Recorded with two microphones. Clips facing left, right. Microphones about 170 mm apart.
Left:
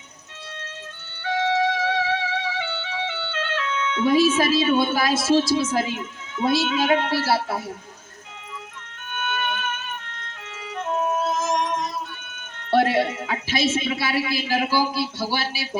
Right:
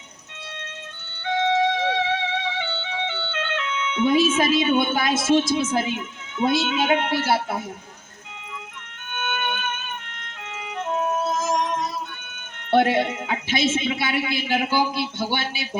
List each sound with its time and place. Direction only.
1.2 s music: 25° right (ahead or behind)
9.1 s music: 20° right (ahead or behind)
11.3 s music: 10° right (ahead or behind)
12.7 s a man's voice: 20° right (ahead or behind)